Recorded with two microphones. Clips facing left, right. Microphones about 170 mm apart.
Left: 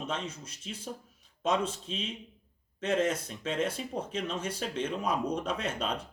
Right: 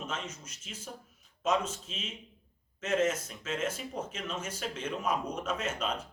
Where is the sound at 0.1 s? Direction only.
30° left (ahead or behind).